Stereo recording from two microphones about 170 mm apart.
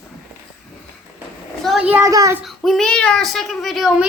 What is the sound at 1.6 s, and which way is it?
Speech, 5° right (ahead or behind).